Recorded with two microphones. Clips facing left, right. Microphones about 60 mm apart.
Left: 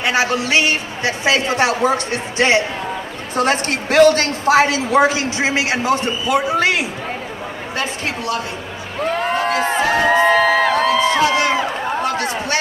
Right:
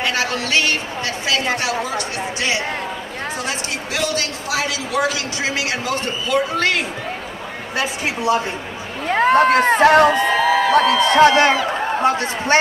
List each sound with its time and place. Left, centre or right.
0.0 s a woman's voice: centre
1.6 s speech: left
3.3 s a woman's voice: left; by 6.9 s centre
9.1 s speech: right
10.0 s speech: left
10.7 s a sound: right
12.0 s a sound: right